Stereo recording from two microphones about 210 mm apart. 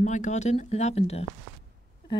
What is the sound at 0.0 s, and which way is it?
Speech, 35° left (ahead or behind).